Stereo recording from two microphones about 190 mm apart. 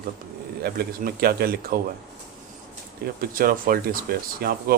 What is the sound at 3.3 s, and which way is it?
Speech, 50° right (ahead or behind).